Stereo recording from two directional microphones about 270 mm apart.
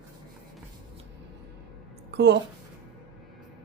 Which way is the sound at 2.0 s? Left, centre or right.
Right.